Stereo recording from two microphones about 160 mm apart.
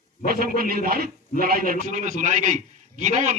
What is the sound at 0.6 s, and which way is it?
A man's voice, 65° right (ahead or behind).